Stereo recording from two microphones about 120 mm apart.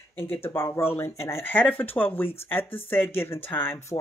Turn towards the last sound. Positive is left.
turn(degrees=20)  # may be behind; listen again after turning